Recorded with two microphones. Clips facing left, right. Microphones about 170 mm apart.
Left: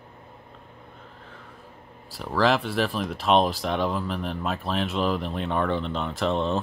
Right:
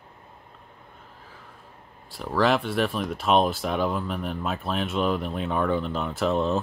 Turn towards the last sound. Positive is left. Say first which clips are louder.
# right 1 dB
turn(degrees=-5)  # may be behind; listen again after turning